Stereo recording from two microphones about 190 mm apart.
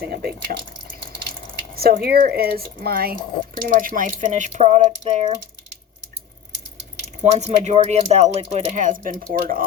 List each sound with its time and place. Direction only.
0.0 s speech: 55° right (ahead or behind)
1.7 s speech: 55° right (ahead or behind); by 5.3 s 35° right (ahead or behind)
7.2 s speech: 40° right (ahead or behind)